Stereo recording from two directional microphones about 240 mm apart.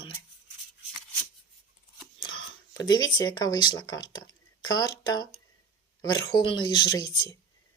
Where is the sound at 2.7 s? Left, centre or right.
Centre.